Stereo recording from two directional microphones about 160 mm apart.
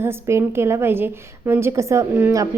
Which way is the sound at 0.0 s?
15° right (ahead or behind).